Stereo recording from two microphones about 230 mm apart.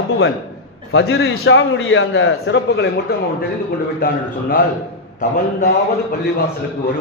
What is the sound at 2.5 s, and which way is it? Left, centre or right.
Speech, left.